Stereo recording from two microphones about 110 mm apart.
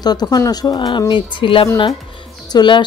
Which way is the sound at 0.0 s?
40° left (ahead or behind).